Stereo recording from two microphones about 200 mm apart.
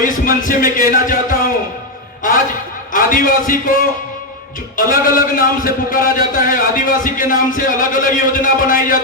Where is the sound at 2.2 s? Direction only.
40° left (ahead or behind).